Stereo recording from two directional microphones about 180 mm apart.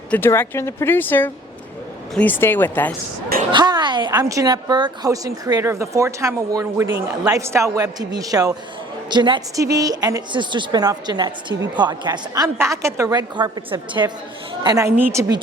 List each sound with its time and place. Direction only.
0.1 s speech: 10° left (ahead or behind)
3.5 s a woman's voice: 25° right (ahead or behind)